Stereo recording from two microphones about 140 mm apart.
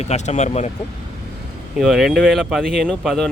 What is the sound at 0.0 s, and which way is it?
Speech, 55° left (ahead or behind).